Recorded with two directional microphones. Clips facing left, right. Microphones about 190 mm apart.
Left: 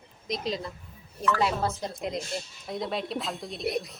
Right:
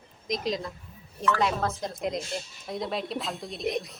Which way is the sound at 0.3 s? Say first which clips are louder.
Right 2 dB; centre (ahead or behind).